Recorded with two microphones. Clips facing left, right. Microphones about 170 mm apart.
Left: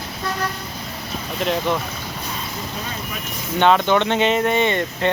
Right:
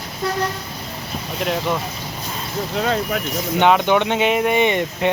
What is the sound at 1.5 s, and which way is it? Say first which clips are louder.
Speech: left 1 dB; 5° right (ahead or behind).